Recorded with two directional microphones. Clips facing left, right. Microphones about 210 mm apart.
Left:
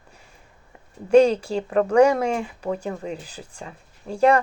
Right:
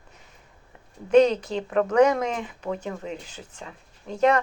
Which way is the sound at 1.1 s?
35° left (ahead or behind).